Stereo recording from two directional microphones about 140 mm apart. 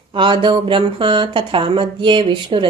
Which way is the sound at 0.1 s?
35° right (ahead or behind).